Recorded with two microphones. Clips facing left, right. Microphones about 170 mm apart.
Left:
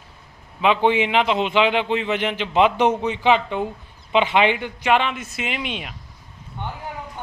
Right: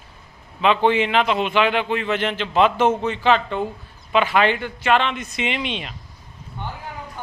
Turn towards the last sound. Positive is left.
turn(degrees=5)  # may be behind; listen again after turning